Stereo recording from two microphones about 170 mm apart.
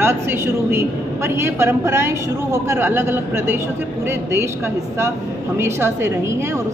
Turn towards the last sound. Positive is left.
turn(degrees=-15)  # may be behind; listen again after turning